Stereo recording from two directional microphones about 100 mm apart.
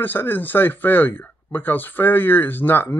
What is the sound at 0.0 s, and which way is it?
Speech, 20° left (ahead or behind).